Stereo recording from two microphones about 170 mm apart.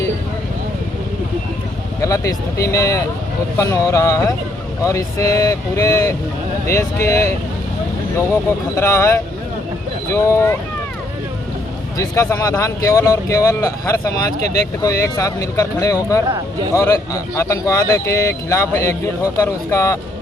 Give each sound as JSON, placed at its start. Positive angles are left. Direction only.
{"t": 2.0, "sound": "speech", "side_deg": 20}
{"t": 8.3, "sound": "speech", "side_deg": 15}
{"t": 11.9, "sound": "speech", "side_deg": 20}